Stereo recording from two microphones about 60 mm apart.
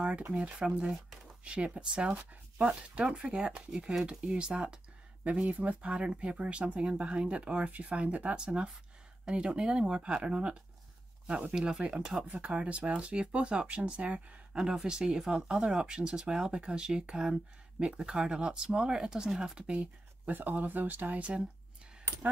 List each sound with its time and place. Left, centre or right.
0.3 s speech: centre